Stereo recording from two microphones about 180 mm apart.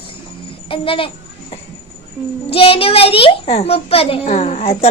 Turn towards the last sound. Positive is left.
turn(degrees=35)  # may be behind; listen again after turning